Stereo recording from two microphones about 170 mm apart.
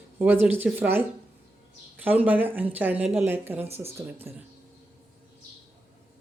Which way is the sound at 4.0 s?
15° right (ahead or behind).